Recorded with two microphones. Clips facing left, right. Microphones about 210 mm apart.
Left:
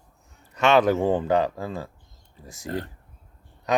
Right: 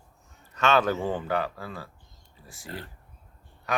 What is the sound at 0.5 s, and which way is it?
Speech, 15° left (ahead or behind).